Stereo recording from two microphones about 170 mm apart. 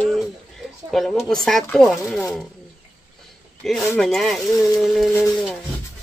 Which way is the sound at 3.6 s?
Centre (ahead or behind).